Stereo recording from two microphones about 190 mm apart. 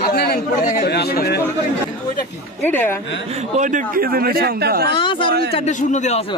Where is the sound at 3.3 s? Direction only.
40° right (ahead or behind); by 4.9 s 55° right (ahead or behind).